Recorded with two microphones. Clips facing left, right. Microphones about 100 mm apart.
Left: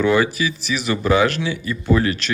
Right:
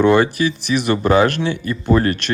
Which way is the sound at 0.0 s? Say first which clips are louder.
Right 4 dB; 50° right (ahead or behind).